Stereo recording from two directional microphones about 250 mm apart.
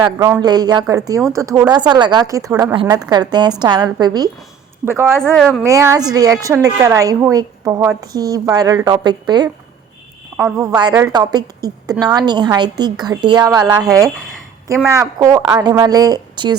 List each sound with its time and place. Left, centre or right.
0.0 s a woman's voice: centre
5.2 s a woman's voice: centre
5.6 s a woman's voice: centre
10.6 s a woman's voice: centre